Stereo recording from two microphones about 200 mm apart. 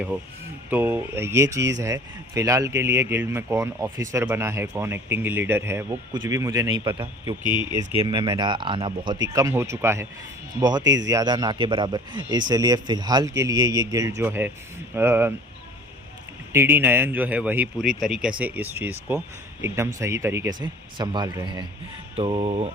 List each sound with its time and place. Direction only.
0.7 s a man's voice: 10° right (ahead or behind)
16.5 s a man's voice: 10° right (ahead or behind); by 22.7 s 30° right (ahead or behind)